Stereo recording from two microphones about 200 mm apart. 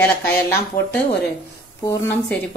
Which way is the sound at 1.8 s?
15° left (ahead or behind).